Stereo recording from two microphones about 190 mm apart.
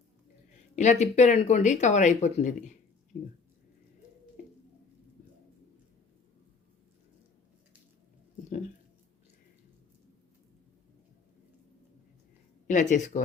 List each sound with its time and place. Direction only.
0.8 s speech: 35° left (ahead or behind)
12.6 s speech: 40° left (ahead or behind)